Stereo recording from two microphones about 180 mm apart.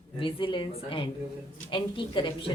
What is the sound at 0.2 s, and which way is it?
A woman's voice, 30° left (ahead or behind).